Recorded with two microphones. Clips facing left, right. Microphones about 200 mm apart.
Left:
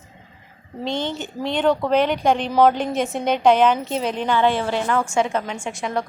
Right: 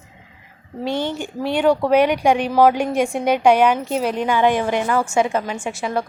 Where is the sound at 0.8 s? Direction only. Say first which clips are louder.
Right 2 dB; 10° right (ahead or behind).